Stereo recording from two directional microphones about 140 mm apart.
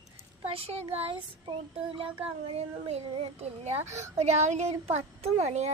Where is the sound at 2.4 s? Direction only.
50° right (ahead or behind).